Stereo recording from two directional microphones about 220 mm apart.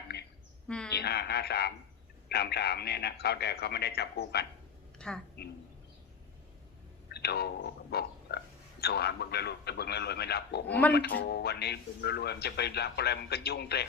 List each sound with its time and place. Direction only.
0.1 s a sound: 50° left (ahead or behind)
0.9 s speech: 45° left (ahead or behind)
4.9 s a sound: 5° left (ahead or behind)
7.1 s speech: 45° left (ahead or behind)
10.7 s speech: 5° left (ahead or behind)
10.9 s speech: 45° left (ahead or behind)